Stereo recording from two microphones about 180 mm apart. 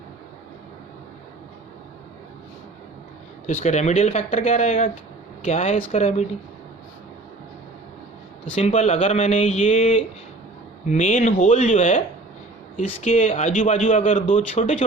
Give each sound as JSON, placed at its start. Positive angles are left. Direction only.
{"t": 3.4, "sound": "speech", "side_deg": 40}
{"t": 8.5, "sound": "a man's voice", "side_deg": 35}